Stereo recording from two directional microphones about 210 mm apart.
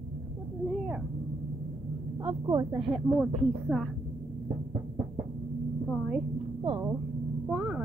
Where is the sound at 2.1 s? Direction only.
20° right (ahead or behind).